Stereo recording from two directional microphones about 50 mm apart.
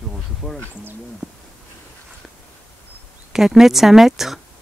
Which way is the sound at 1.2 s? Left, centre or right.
Centre.